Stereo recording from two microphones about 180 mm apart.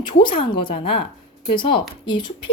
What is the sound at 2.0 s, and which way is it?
Speech, 25° left (ahead or behind).